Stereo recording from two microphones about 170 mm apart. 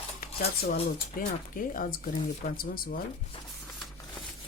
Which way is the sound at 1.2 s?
55° left (ahead or behind).